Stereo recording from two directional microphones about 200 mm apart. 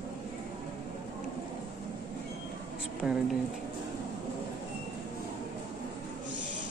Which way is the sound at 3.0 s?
5° right (ahead or behind).